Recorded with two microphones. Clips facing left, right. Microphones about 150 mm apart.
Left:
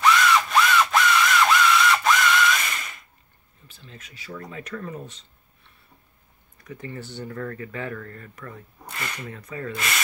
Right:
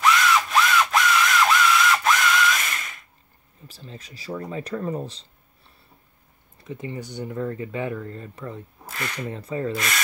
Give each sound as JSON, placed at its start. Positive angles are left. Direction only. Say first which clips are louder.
{"t": 0.0, "sound": "a sound", "louder": "left 1 dB", "side_deg": 0}
{"t": 3.6, "sound": "speech", "louder": "right 5 dB", "side_deg": -35}
{"t": 6.6, "sound": "speech", "louder": "right 3 dB", "side_deg": -20}
{"t": 8.8, "sound": "a sound", "louder": "right 2 dB", "side_deg": 0}
{"t": 9.3, "sound": "speech", "louder": "right 6 dB", "side_deg": -30}
{"t": 9.8, "sound": "sanding", "louder": "right 1 dB", "side_deg": 0}